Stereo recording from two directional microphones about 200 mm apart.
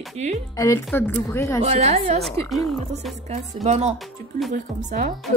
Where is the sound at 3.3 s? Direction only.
35° right (ahead or behind).